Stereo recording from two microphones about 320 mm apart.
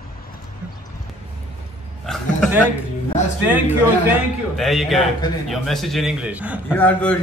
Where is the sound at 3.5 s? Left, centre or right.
Centre.